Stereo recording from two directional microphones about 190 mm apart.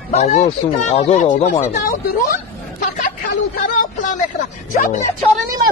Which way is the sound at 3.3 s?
45° left (ahead or behind).